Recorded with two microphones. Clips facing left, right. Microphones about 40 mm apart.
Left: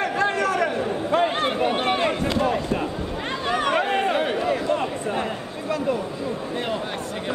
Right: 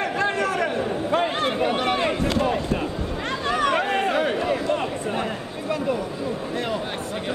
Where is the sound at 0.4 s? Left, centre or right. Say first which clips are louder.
Left 1 dB; right.